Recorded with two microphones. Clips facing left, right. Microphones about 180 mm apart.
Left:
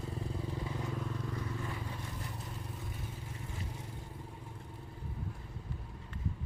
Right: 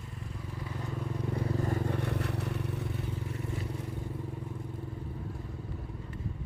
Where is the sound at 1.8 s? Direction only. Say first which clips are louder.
Right 11 dB; 65° right (ahead or behind).